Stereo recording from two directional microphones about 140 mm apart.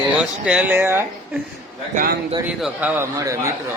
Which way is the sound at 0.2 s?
5° right (ahead or behind).